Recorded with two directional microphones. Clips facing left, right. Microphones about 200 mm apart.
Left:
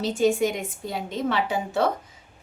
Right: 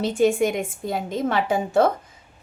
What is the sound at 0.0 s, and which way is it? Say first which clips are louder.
A woman's voice: right 2 dB; 55° right (ahead or behind).